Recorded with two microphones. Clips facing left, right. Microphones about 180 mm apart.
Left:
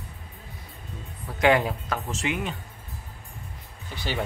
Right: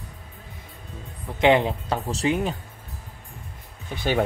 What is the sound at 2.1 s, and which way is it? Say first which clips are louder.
Speech: right 7 dB; 35° right (ahead or behind).